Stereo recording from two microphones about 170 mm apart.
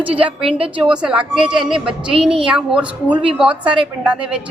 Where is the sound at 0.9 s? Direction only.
5° right (ahead or behind).